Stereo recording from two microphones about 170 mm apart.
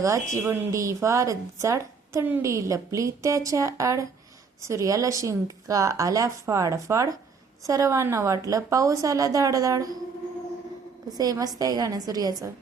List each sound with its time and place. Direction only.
0.3 s a woman's voice: 15° right (ahead or behind)
11.2 s speech: 20° right (ahead or behind)